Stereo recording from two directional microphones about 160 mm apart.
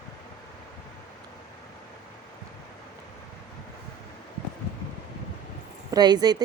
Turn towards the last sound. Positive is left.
turn(degrees=-25)  # may be behind; listen again after turning